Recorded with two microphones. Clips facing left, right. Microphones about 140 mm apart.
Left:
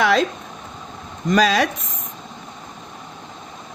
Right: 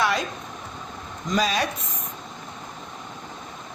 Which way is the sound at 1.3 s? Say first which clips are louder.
Left 7 dB; 90° left.